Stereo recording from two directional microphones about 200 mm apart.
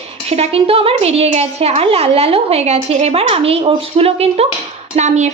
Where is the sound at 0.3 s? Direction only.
30° right (ahead or behind).